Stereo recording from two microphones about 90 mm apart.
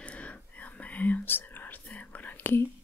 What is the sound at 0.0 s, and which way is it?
Whispering, 15° left (ahead or behind).